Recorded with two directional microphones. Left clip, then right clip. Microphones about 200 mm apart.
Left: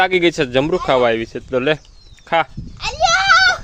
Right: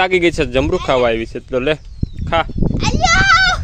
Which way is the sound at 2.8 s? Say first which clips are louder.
Right 1 dB; 30° right (ahead or behind).